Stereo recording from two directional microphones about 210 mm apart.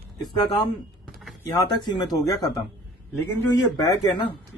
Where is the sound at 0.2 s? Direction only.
20° left (ahead or behind).